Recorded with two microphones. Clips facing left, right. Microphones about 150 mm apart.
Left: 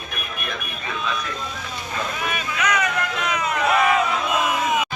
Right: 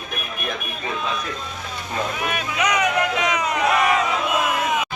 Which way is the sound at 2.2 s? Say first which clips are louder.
Even; 15° right (ahead or behind).